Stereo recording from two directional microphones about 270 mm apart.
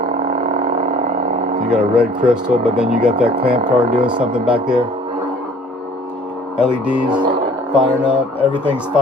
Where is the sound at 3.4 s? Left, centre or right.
Right.